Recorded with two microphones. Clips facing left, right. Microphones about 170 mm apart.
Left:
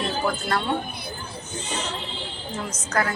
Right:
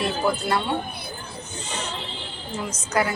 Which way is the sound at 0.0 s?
10° right (ahead or behind).